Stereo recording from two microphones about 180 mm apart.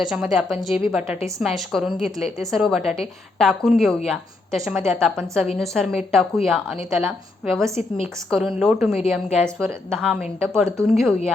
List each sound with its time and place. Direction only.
0.0 s a woman's voice: centre (ahead or behind)
7.8 s a woman's voice: 35° left (ahead or behind)
8.3 s a woman's voice: centre (ahead or behind)